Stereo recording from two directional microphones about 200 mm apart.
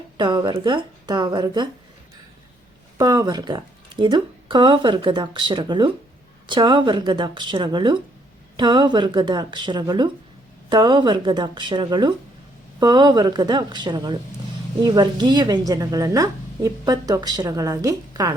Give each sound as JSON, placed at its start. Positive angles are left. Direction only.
{"t": 0.2, "sound": "a woman's voice", "side_deg": -20}
{"t": 3.0, "sound": "a woman's voice", "side_deg": -20}